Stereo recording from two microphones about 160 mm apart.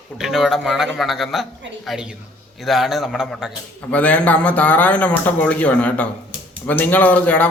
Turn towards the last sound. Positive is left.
turn(degrees=10)  # may be behind; listen again after turning